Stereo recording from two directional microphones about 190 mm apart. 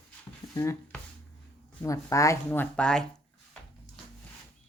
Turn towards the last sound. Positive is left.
turn(degrees=5)  # may be behind; listen again after turning